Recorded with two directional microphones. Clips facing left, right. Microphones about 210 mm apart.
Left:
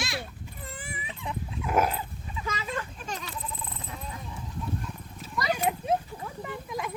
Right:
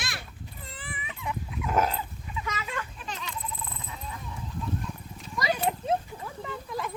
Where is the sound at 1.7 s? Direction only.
10° left (ahead or behind).